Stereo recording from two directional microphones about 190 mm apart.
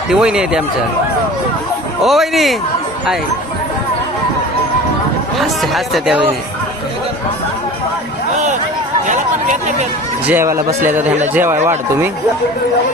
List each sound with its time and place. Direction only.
0.1 s speech: 5° right (ahead or behind)
2.0 s speech: centre (ahead or behind)
5.4 s speech: centre (ahead or behind)
9.0 s chatter: 40° right (ahead or behind)
10.2 s speech: 15° right (ahead or behind)